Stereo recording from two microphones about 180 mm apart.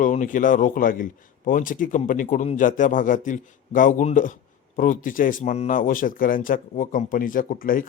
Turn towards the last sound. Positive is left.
turn(degrees=50)  # may be behind; listen again after turning